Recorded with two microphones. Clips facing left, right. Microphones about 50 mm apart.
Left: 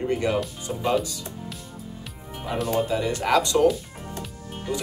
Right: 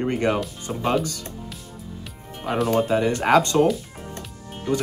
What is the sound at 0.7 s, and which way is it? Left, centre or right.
Speech, right.